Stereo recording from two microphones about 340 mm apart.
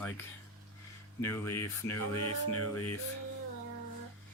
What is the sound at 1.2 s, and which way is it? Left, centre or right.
Speech, centre.